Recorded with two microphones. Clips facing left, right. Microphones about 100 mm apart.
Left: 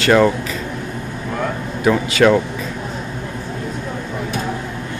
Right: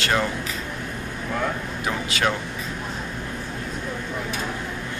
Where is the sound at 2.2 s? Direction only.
90° left.